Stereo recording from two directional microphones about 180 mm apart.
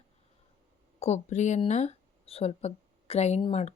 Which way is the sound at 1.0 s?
40° left (ahead or behind).